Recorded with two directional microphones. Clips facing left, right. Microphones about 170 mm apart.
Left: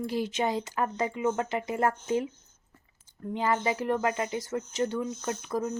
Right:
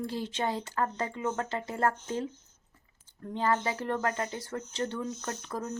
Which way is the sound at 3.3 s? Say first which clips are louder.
Left 2 dB; 10° left (ahead or behind).